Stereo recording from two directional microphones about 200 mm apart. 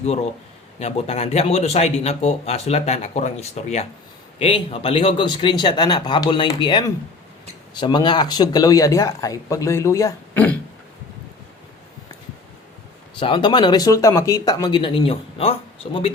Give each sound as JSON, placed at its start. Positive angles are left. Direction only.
{"t": 0.0, "sound": "speech", "side_deg": 35}
{"t": 13.1, "sound": "speech", "side_deg": 25}